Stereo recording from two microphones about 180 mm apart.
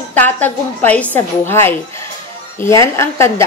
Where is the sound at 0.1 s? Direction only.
10° left (ahead or behind).